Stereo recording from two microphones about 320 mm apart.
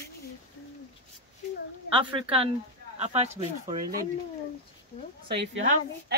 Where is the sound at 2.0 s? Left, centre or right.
Centre.